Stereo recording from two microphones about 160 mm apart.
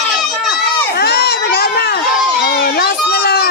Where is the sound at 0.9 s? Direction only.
85° left.